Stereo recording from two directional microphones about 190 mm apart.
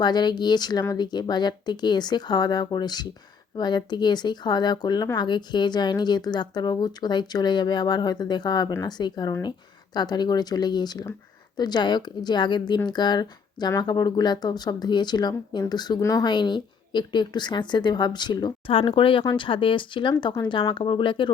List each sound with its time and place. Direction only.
0.0 s speech: 20° left (ahead or behind)